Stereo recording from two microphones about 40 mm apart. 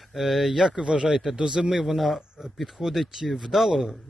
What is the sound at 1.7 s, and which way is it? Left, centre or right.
Speech, centre.